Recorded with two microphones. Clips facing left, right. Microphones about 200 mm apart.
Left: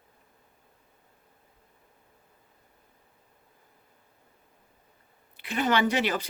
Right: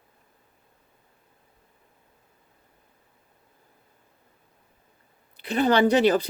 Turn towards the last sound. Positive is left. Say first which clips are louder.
# right 7 dB
turn(degrees=-40)  # may be behind; listen again after turning